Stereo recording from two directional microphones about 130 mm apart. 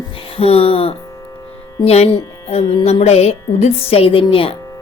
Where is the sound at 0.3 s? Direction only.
50° left (ahead or behind).